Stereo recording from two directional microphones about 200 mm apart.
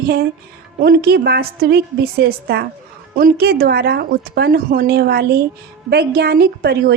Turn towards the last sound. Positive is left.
turn(degrees=-50)  # may be behind; listen again after turning